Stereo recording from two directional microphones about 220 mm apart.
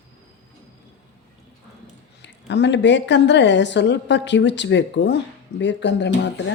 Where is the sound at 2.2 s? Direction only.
55° left (ahead or behind).